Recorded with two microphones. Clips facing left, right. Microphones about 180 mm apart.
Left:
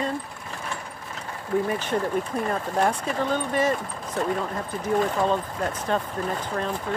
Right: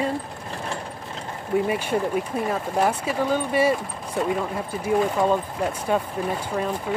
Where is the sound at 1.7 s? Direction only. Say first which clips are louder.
Right 2 dB; 10° right (ahead or behind).